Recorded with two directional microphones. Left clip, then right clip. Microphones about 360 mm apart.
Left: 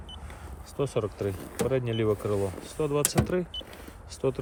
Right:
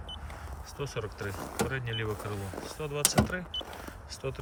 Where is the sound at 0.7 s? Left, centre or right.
Centre.